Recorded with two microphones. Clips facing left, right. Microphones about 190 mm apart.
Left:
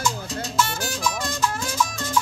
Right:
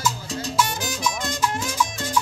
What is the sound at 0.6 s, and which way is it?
Music, 15° right (ahead or behind).